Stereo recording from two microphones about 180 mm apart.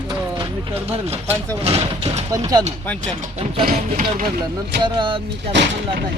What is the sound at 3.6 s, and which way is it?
Speech, 50° right (ahead or behind).